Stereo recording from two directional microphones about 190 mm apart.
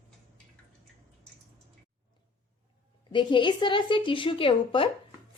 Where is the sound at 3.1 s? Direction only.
25° left (ahead or behind).